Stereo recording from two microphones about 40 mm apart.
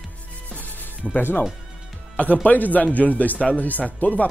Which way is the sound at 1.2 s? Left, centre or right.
Left.